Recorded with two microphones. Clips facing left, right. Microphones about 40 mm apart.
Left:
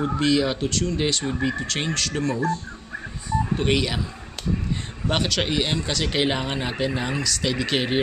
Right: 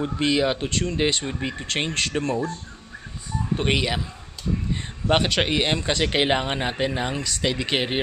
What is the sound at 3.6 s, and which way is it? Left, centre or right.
Speech, centre.